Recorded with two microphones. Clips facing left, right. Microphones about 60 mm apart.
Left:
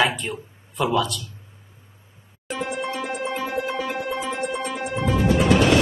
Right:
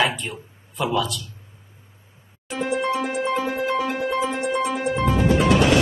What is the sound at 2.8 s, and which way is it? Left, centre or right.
Music, right.